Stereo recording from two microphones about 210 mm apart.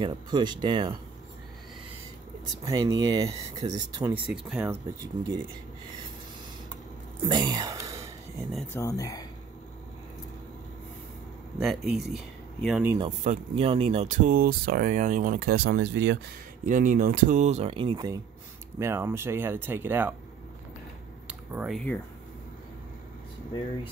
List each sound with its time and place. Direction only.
0.0 s speech: 20° right (ahead or behind)
2.6 s speech: 15° right (ahead or behind)
4.3 s speech: 5° right (ahead or behind)
7.2 s sigh: 20° right (ahead or behind)
8.7 s speech: 15° left (ahead or behind)
11.5 s speech: centre (ahead or behind)
13.2 s speech: 30° right (ahead or behind); by 16.2 s 55° right (ahead or behind)
16.6 s speech: 40° right (ahead or behind); by 20.2 s 10° right (ahead or behind)
21.3 s speech: 5° right (ahead or behind)